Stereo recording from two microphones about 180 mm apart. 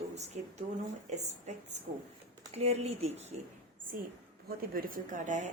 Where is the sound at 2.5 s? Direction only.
35° right (ahead or behind).